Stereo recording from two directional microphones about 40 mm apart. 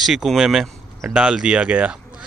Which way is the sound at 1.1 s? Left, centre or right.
Right.